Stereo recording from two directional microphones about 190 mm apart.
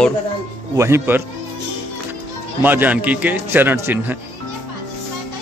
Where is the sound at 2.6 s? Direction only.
10° right (ahead or behind).